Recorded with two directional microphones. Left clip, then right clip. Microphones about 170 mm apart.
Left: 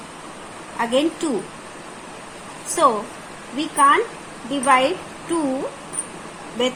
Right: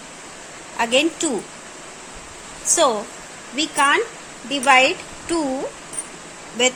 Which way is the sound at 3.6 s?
65° right (ahead or behind).